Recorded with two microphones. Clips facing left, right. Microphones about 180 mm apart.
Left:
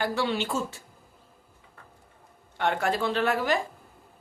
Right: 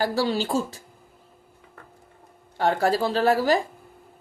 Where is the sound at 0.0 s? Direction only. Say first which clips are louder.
Right 4 dB; 35° right (ahead or behind).